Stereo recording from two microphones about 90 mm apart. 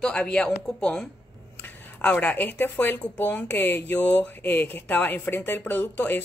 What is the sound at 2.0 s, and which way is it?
Speech, 20° left (ahead or behind).